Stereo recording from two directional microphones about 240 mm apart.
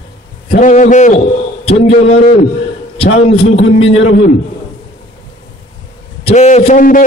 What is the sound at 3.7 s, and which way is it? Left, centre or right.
Speech, left.